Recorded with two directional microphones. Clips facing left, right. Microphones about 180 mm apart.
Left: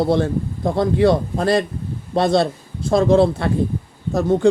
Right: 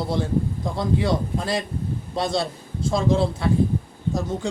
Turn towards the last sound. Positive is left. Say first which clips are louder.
# left 8 dB
turn(degrees=60)  # may be behind; listen again after turning